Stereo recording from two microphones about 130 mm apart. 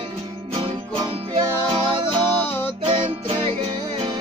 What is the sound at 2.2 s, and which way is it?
Music, 15° left (ahead or behind).